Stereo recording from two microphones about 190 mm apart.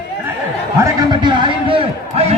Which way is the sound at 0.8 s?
20° right (ahead or behind).